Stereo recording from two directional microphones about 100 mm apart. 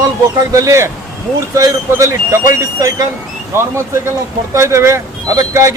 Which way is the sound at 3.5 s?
25° right (ahead or behind).